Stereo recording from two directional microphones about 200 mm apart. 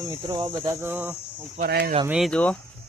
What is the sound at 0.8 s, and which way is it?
Speech, 10° right (ahead or behind).